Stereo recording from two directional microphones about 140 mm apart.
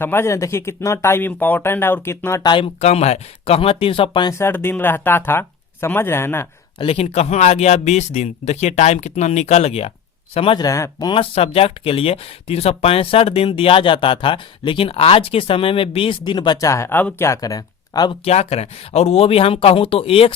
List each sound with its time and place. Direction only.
0.0 s speech: 15° left (ahead or behind)
2.4 s speech: 35° left (ahead or behind)
2.8 s speech: 50° left (ahead or behind); by 4.4 s 35° left (ahead or behind)
4.4 s speech: 15° left (ahead or behind)
6.7 s speech: 45° left (ahead or behind)
10.6 s speech: 25° left (ahead or behind)
11.1 s speech: 40° left (ahead or behind)
16.6 s speech: 20° left (ahead or behind)
18.3 s speech: 50° left (ahead or behind)